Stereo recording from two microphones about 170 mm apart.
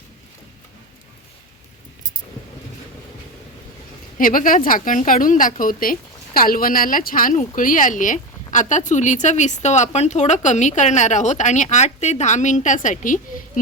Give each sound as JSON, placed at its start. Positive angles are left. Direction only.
{"t": 4.2, "sound": "a woman's voice", "side_deg": 55}